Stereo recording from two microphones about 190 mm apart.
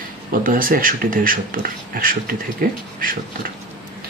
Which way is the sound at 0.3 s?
45° right (ahead or behind).